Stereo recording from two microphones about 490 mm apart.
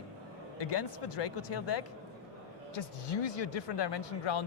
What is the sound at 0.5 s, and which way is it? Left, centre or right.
Speech, left.